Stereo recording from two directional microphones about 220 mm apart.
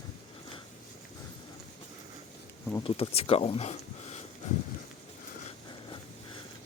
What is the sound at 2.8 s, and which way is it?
Speech, 25° left (ahead or behind).